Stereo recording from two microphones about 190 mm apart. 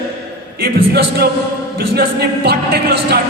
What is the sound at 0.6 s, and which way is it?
A man's voice, 55° right (ahead or behind).